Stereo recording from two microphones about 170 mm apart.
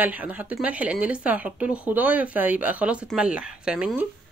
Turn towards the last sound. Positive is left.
turn(degrees=-5)  # may be behind; listen again after turning